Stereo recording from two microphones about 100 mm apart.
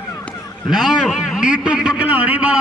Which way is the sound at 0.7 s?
Centre (ahead or behind).